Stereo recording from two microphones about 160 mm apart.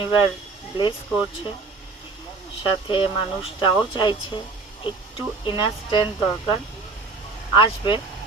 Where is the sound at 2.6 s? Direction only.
30° left (ahead or behind).